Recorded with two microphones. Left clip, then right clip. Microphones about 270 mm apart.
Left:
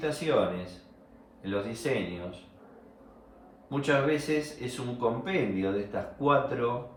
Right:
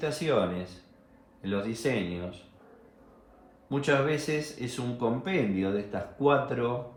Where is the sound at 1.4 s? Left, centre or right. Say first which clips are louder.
Even; right.